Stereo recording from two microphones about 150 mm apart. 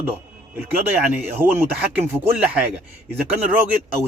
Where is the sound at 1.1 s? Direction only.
15° right (ahead or behind).